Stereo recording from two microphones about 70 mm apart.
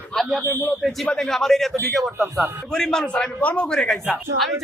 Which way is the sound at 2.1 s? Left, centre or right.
Right.